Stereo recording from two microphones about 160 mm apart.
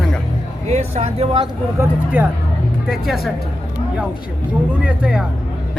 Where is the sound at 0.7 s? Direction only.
45° right (ahead or behind).